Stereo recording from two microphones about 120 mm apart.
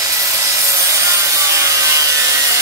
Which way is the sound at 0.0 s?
25° right (ahead or behind).